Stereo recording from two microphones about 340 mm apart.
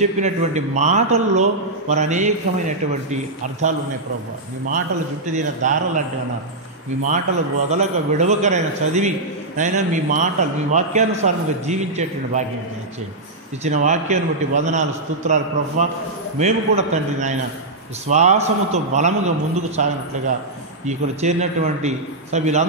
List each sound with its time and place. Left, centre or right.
0.0 s a man's voice: centre
5.2 s a man's voice: right
7.7 s a man's voice: centre
13.7 s a man's voice: right